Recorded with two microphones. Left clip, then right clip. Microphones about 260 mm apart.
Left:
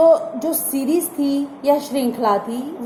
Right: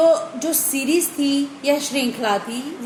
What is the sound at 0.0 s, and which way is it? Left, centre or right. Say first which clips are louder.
A woman's voice: left 3 dB; centre.